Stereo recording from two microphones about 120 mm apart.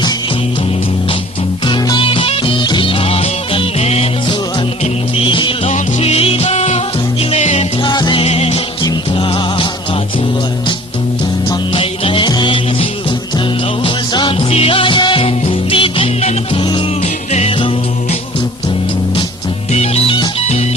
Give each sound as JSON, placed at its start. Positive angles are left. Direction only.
{"t": 1.6, "sound": "music", "side_deg": 40}
{"t": 5.1, "sound": "music", "side_deg": 45}
{"t": 5.7, "sound": "music", "side_deg": 60}
{"t": 7.9, "sound": "music", "side_deg": 40}
{"t": 8.2, "sound": "music", "side_deg": 60}
{"t": 11.7, "sound": "music", "side_deg": 50}
{"t": 19.7, "sound": "music", "side_deg": 60}